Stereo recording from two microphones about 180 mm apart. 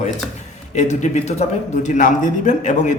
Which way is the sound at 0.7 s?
40° left (ahead or behind).